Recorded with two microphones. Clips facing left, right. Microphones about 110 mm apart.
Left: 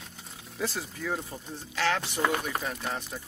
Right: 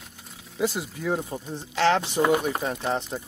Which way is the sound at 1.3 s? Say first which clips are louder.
Right 6 dB; 30° right (ahead or behind).